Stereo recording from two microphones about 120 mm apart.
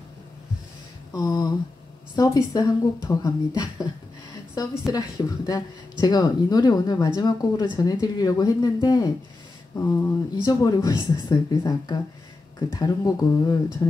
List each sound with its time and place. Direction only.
1.1 s speech: 30° left (ahead or behind)
9.8 s speech: 25° left (ahead or behind)